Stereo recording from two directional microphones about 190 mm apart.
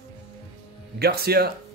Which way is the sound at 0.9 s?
55° right (ahead or behind).